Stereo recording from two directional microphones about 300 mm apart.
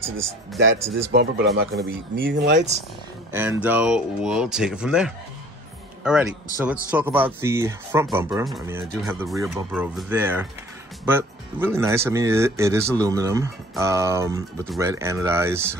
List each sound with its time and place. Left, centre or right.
0.0 s speech: centre
1.1 s speech: right
3.3 s speech: centre
6.9 s speech: centre